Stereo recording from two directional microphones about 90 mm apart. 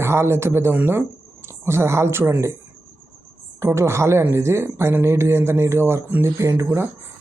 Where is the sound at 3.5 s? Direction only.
30° right (ahead or behind).